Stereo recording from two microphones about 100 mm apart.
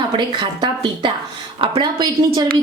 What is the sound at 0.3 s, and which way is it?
Speech, 50° right (ahead or behind).